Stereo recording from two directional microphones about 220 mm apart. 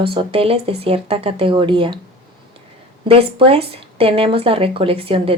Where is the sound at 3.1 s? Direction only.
25° right (ahead or behind).